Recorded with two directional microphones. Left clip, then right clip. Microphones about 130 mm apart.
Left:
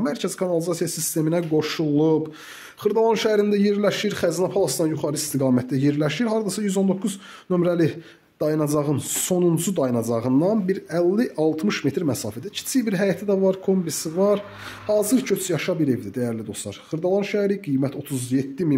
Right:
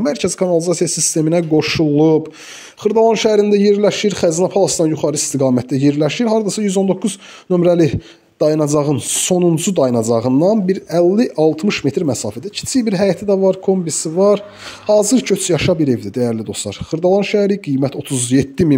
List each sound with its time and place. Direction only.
0.0 s speech: 35° right (ahead or behind)
18.3 s speech: 55° right (ahead or behind)